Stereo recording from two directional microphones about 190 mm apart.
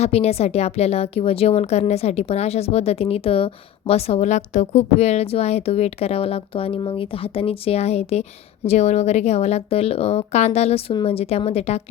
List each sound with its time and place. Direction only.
0.0 s a woman's voice: 35° left (ahead or behind)